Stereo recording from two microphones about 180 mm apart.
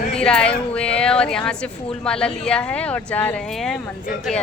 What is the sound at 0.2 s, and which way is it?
A woman's voice, 5° left (ahead or behind).